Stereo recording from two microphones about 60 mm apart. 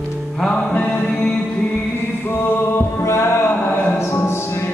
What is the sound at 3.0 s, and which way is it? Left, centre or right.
Music, left.